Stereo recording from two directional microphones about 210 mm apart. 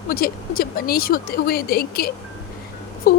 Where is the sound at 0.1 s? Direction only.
45° left (ahead or behind).